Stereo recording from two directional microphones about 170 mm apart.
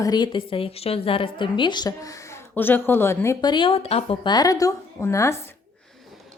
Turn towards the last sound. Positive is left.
turn(degrees=15)  # may be behind; listen again after turning